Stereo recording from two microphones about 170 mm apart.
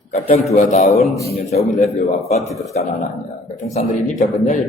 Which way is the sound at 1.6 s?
Centre (ahead or behind).